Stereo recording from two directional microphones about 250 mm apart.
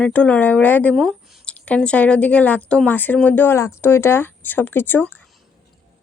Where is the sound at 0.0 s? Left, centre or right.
Centre.